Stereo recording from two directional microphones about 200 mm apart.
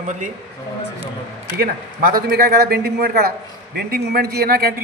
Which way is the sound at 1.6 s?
45° right (ahead or behind).